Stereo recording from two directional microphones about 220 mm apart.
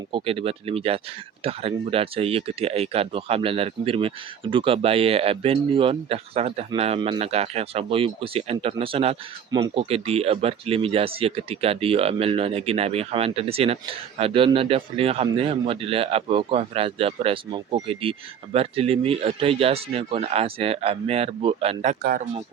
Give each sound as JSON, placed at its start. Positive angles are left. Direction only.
{"t": 0.1, "sound": "speech", "side_deg": -25}